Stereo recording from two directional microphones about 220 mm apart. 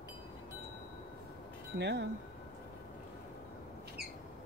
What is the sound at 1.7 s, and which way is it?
Speech, 50° right (ahead or behind).